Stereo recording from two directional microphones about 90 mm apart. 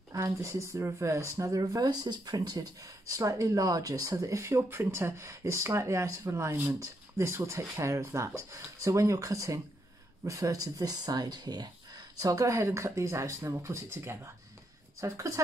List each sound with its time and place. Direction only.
0.1 s speech: 35° right (ahead or behind)